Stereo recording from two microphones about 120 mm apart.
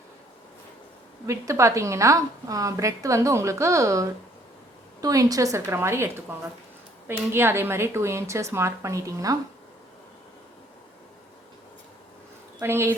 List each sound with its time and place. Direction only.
1.3 s a woman's voice: 25° right (ahead or behind)
12.5 s a woman's voice: 20° right (ahead or behind)